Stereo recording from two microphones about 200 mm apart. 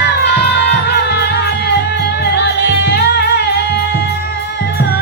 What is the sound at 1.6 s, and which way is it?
Music, 55° left (ahead or behind).